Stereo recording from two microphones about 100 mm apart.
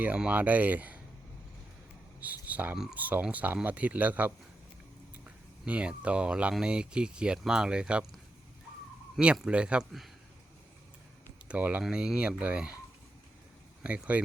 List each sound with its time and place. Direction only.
0.0 s speech: 15° right (ahead or behind)
2.2 s speech: 15° right (ahead or behind)
9.1 s speech: 5° right (ahead or behind)
11.4 s speech: 15° right (ahead or behind)
13.8 s speech: 15° right (ahead or behind)